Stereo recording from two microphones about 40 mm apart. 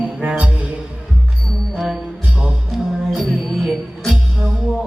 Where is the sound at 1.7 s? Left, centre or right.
Centre.